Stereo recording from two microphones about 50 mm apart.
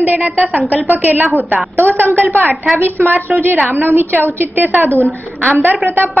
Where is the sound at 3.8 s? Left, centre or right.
Right.